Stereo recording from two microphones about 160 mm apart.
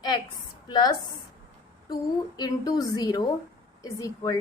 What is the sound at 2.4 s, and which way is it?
A woman's voice, 25° left (ahead or behind).